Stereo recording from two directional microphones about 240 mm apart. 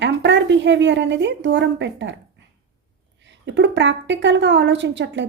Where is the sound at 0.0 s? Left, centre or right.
Right.